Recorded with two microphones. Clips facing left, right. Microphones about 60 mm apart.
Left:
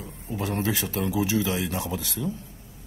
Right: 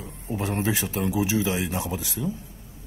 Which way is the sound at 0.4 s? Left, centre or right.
Right.